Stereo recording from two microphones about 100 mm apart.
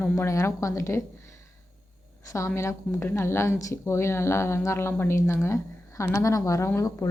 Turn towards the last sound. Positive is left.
turn(degrees=30)  # may be behind; listen again after turning